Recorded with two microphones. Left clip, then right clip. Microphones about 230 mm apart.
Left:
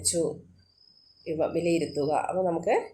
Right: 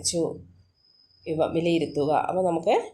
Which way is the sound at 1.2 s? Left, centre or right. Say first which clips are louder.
Right 2 dB; right.